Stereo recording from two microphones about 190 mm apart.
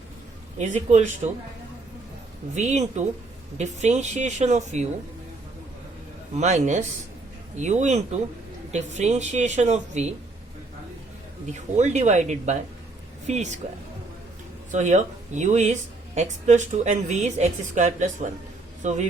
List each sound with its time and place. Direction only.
0.6 s speech: 40° right (ahead or behind)
2.6 s speech: 40° right (ahead or behind)
6.3 s speech: 35° right (ahead or behind)
11.5 s speech: 35° right (ahead or behind)
14.7 s speech: 40° right (ahead or behind)